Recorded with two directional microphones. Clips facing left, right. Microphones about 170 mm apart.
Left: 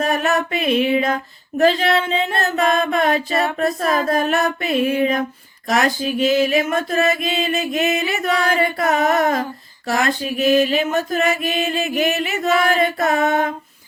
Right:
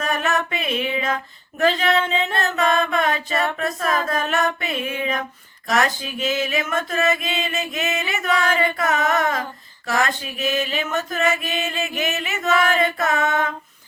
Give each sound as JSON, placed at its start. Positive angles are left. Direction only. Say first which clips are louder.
{"t": 0.0, "sound": "mantra", "louder": "left 4 dB", "side_deg": 35}